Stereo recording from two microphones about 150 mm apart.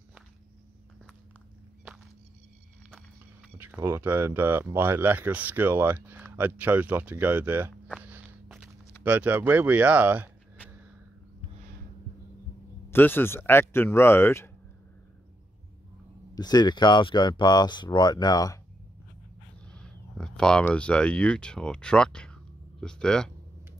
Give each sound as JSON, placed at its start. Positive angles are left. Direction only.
{"t": 3.5, "sound": "speech", "side_deg": -15}
{"t": 9.0, "sound": "speech", "side_deg": -10}
{"t": 12.9, "sound": "speech", "side_deg": 15}
{"t": 16.3, "sound": "speech", "side_deg": 30}
{"t": 19.7, "sound": "speech", "side_deg": 5}